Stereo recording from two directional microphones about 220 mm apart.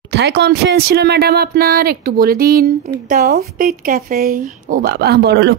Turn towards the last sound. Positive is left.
turn(degrees=-50)  # may be behind; listen again after turning